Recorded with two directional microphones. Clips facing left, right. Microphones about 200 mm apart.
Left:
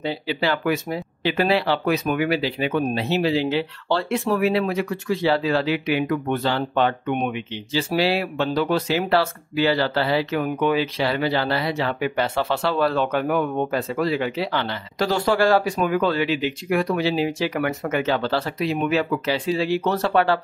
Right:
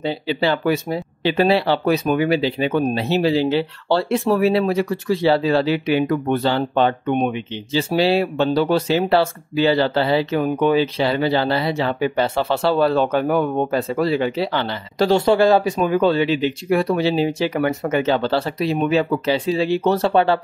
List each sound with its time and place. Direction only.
0.0 s speech: 25° right (ahead or behind)